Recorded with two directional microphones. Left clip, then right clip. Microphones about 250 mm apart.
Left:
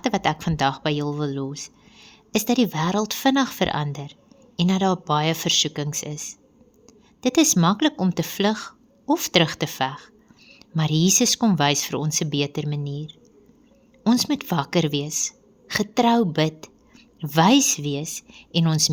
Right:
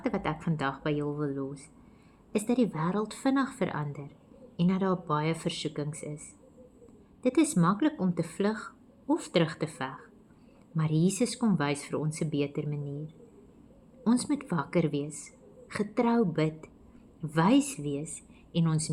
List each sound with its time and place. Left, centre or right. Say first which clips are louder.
0.0 s speech: left 10 dB; left
14.0 s speech: left 7 dB; left